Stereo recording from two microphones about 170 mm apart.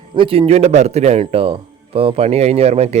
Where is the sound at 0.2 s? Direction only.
35° right (ahead or behind).